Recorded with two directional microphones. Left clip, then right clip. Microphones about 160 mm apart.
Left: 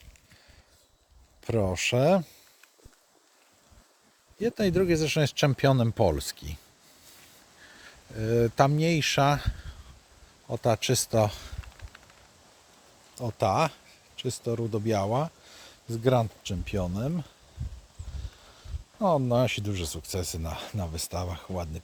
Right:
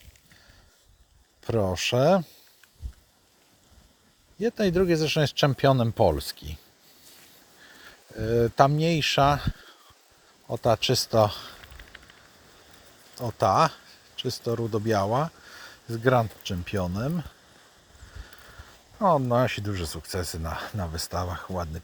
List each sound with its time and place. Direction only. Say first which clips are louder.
1.4 s speech: right 2 dB; 10° left (ahead or behind)
4.4 s speech: right 2 dB; 10° left (ahead or behind)
7.8 s speech: right 2 dB; 20° left (ahead or behind)
13.1 s speech: right 4 dB; 5° left (ahead or behind)
18.9 s speech: right 3 dB; 15° left (ahead or behind)